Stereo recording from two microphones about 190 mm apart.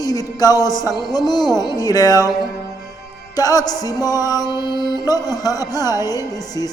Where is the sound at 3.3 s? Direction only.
20° left (ahead or behind).